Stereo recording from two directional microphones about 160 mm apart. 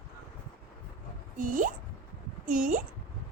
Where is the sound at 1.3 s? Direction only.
55° right (ahead or behind).